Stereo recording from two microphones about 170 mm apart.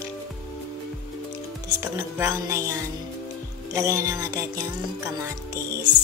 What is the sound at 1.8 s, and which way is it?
Speech, 15° right (ahead or behind).